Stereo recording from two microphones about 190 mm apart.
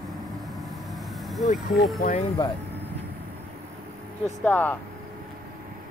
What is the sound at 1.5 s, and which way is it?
Speech, 50° left (ahead or behind).